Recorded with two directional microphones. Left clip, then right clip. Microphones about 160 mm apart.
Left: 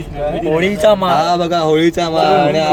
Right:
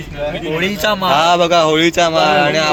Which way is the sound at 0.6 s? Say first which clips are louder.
Left 5 dB; 50° right (ahead or behind).